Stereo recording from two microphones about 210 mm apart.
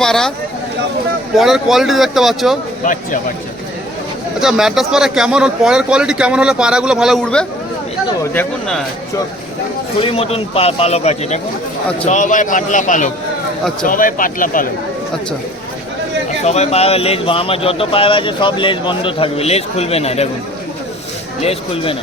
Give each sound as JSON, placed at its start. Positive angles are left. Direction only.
{"t": 0.0, "sound": "speech", "side_deg": 5}
{"t": 1.4, "sound": "speech", "side_deg": 0}
{"t": 2.8, "sound": "a man's voice", "side_deg": 40}
{"t": 4.4, "sound": "speech", "side_deg": 0}
{"t": 10.0, "sound": "a man's voice", "side_deg": 25}
{"t": 16.4, "sound": "a man's voice", "side_deg": 30}
{"t": 21.4, "sound": "a man's voice", "side_deg": 25}